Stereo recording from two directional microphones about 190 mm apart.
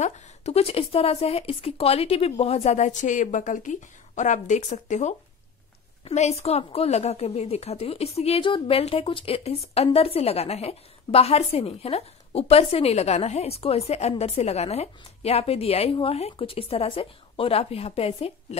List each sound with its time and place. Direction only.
0.0 s a woman's voice: 35° left (ahead or behind)